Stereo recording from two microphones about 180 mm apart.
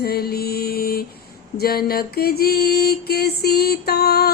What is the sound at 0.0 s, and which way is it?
Mantra, 60° left (ahead or behind).